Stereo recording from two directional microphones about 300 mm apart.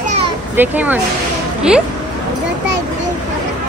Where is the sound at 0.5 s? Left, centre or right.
Centre.